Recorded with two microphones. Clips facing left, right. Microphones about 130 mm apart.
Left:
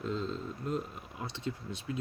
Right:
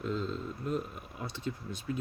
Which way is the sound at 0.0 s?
30° left (ahead or behind).